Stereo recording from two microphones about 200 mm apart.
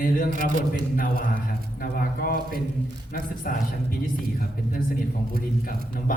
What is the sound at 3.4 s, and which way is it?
Speech, 45° left (ahead or behind).